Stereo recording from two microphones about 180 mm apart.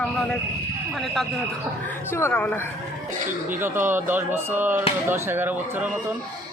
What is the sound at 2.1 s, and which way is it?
Speech, 10° left (ahead or behind).